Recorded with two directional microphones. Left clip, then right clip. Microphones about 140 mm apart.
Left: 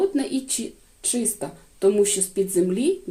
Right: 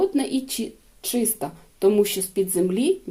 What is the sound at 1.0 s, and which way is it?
Speech, 30° right (ahead or behind).